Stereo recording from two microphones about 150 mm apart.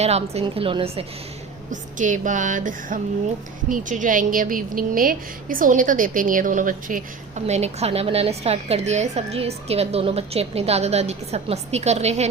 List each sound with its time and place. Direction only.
0.0 s a woman's voice: 45° right (ahead or behind)
1.7 s music: 60° right (ahead or behind)
3.7 s a woman's voice: 60° right (ahead or behind)